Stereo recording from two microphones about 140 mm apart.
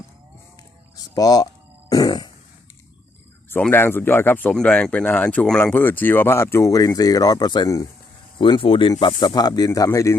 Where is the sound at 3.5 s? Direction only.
15° left (ahead or behind).